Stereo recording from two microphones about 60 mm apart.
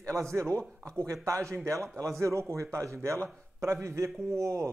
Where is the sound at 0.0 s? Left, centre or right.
Right.